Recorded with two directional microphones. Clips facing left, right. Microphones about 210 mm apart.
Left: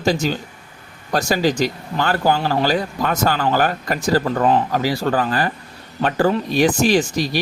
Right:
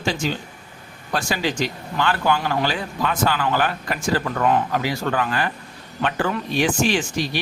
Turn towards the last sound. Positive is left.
turn(degrees=40)  # may be behind; listen again after turning